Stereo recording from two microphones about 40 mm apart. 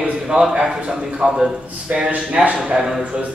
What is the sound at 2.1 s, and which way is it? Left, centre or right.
Speech, right.